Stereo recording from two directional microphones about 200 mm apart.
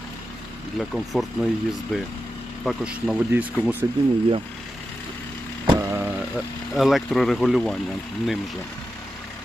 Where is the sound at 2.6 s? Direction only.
5° right (ahead or behind).